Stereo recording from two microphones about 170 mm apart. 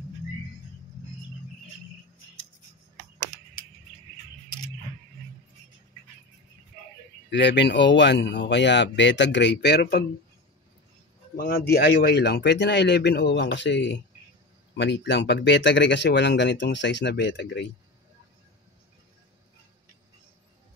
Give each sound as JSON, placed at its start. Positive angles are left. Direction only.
{"t": 7.2, "sound": "speech", "side_deg": 90}
{"t": 11.3, "sound": "speech", "side_deg": 65}